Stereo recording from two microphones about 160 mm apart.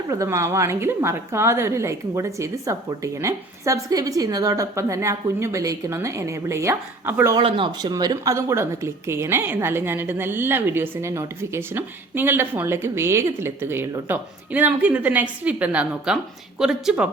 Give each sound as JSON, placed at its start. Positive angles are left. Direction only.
{"t": 0.1, "sound": "speech", "side_deg": -20}
{"t": 7.3, "sound": "speech", "side_deg": -30}